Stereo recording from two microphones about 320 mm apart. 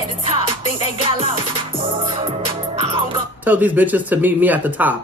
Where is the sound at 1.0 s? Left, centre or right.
Centre.